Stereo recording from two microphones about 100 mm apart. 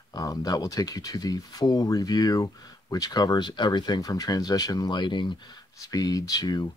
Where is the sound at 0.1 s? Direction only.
35° left (ahead or behind).